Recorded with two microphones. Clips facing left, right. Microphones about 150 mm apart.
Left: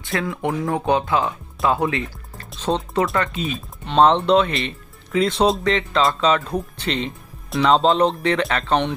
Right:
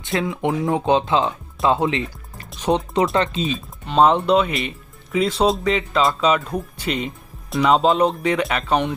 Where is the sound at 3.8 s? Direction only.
5° right (ahead or behind).